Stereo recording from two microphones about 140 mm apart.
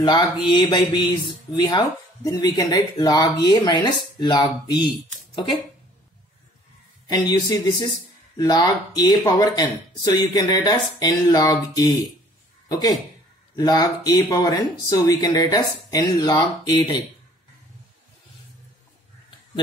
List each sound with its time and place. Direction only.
0.0 s speech: 30° left (ahead or behind)
7.1 s speech: 30° left (ahead or behind)